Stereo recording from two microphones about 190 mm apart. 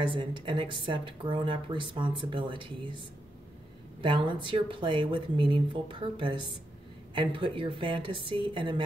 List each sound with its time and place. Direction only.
0.0 s speech: 25° right (ahead or behind)
4.0 s speech: 25° right (ahead or behind)